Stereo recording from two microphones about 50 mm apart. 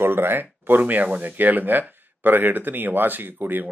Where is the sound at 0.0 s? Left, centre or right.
Right.